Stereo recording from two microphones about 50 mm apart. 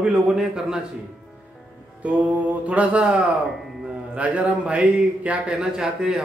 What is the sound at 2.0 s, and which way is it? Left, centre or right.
Mantra, right.